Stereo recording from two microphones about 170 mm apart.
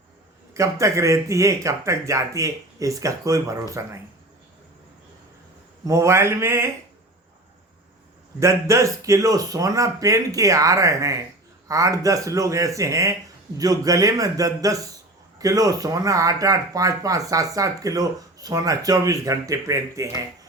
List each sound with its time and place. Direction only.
0.5 s speech: 20° right (ahead or behind)
5.8 s speech: 20° right (ahead or behind)
8.4 s speech: 15° right (ahead or behind)